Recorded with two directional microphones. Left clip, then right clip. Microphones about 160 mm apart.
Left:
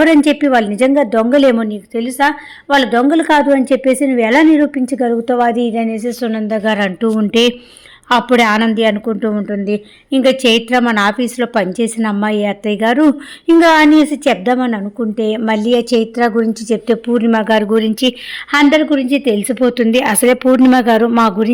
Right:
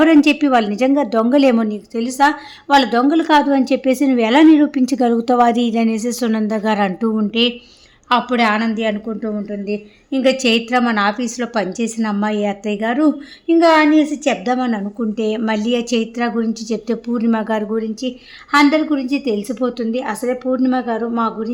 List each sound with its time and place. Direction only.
0.0 s a woman's voice: 15° left (ahead or behind)
3.7 s a woman's voice: 5° left (ahead or behind)
7.3 s speech: 40° left (ahead or behind)
13.5 s speech: 45° left (ahead or behind)
14.4 s a woman's voice: 25° left (ahead or behind)
16.7 s a woman's voice: 15° left (ahead or behind)
17.7 s speech: 40° left (ahead or behind)
18.5 s speech: 30° left (ahead or behind)